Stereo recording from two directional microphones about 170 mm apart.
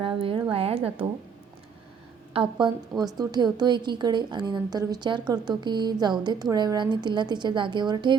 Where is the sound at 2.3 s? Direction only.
30° right (ahead or behind).